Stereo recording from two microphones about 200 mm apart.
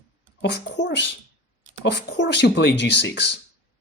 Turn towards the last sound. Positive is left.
turn(degrees=60)  # may be behind; listen again after turning